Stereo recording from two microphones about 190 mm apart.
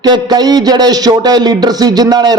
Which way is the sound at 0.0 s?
20° right (ahead or behind).